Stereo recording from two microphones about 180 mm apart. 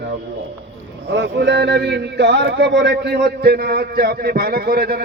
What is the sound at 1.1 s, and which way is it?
A man's voice, 75° right (ahead or behind).